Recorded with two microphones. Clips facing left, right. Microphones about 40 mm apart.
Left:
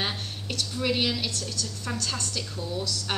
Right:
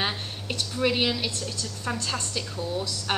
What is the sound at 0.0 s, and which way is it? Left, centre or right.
A woman's voice, right.